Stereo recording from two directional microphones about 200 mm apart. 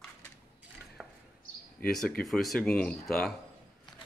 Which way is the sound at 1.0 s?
5° right (ahead or behind).